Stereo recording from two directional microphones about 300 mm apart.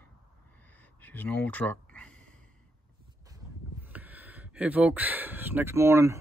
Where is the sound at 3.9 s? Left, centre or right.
Centre.